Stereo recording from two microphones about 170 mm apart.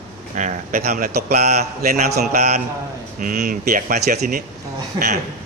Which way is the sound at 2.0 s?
70° right (ahead or behind).